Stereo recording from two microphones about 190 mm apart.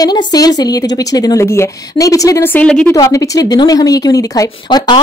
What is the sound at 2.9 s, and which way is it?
Speech, 15° left (ahead or behind).